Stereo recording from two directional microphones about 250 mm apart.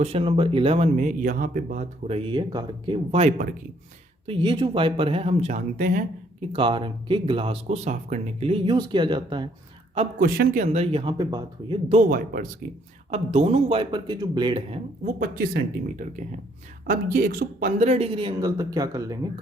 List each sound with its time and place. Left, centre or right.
0.0 s speech: right
6.5 s speech: centre
10.2 s speech: right
15.2 s speech: right; by 19.3 s centre